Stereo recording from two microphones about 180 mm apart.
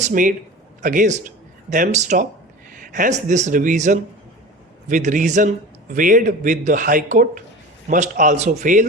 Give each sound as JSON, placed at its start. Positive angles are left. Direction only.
{"t": 0.0, "sound": "a man's voice", "side_deg": -45}